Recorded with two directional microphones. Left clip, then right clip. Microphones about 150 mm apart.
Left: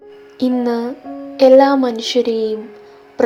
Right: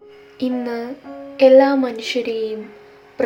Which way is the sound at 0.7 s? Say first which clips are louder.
Left 6 dB; 20° left (ahead or behind).